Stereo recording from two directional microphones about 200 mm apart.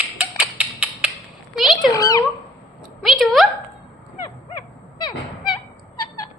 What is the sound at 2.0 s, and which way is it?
Cat, 15° left (ahead or behind).